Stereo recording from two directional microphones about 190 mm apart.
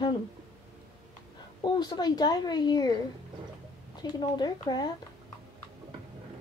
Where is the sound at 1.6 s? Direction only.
25° left (ahead or behind).